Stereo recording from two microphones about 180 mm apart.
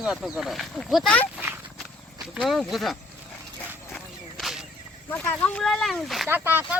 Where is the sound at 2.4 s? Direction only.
Centre (ahead or behind).